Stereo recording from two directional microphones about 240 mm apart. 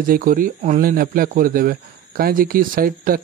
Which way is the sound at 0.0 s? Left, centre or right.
Right.